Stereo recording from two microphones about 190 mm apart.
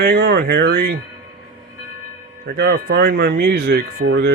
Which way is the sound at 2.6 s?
55° right (ahead or behind).